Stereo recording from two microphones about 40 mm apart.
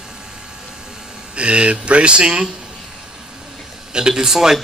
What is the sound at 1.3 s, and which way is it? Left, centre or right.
A man's voice, right.